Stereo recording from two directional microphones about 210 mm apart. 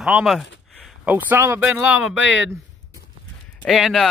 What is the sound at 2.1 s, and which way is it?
Speech, 60° left (ahead or behind).